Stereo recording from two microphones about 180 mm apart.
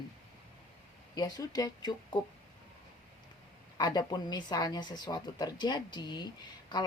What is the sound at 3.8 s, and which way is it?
Speech, 25° left (ahead or behind).